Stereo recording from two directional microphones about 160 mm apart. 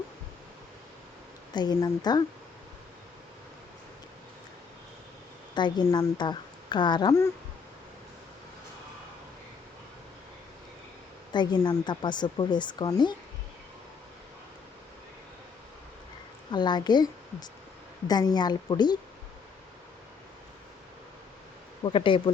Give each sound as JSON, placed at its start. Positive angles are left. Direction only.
{"t": 1.5, "sound": "speech", "side_deg": 25}
{"t": 5.5, "sound": "speech", "side_deg": 30}
{"t": 11.3, "sound": "speech", "side_deg": 30}
{"t": 16.5, "sound": "speech", "side_deg": 30}
{"t": 18.1, "sound": "speech", "side_deg": 25}
{"t": 21.8, "sound": "speech", "side_deg": 30}